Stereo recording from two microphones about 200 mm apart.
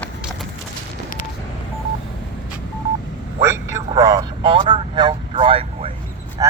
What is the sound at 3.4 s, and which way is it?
Vehicle, 15° right (ahead or behind).